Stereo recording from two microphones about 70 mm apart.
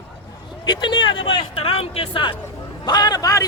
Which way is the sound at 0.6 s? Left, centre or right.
Left.